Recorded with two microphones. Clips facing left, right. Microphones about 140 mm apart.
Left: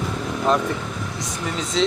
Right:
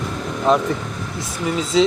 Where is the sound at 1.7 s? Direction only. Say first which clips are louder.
Right 5 dB; 5° right (ahead or behind).